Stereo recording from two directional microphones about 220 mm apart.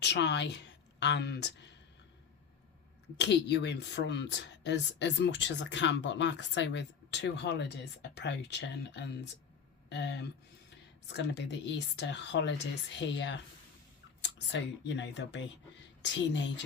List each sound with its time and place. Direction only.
0.0 s a woman's voice: 50° left (ahead or behind)
3.2 s a woman's voice: 50° left (ahead or behind)